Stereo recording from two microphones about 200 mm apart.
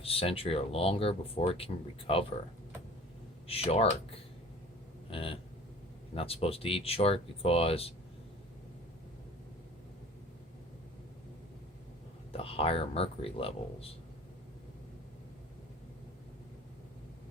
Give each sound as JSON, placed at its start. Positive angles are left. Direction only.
{"t": 0.0, "sound": "speech", "side_deg": 30}
{"t": 3.4, "sound": "speech", "side_deg": 30}
{"t": 12.3, "sound": "speech", "side_deg": 30}